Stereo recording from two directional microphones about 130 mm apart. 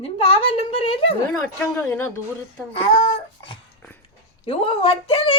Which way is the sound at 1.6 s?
15° left (ahead or behind).